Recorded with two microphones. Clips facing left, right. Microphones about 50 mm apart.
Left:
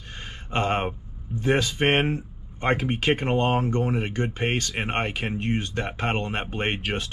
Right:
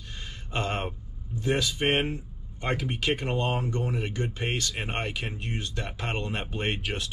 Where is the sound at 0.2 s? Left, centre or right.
Left.